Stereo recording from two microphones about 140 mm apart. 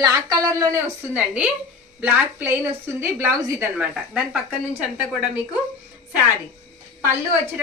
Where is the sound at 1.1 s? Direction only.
10° right (ahead or behind).